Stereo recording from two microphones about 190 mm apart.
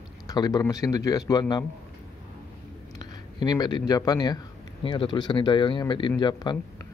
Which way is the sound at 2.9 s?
20° left (ahead or behind).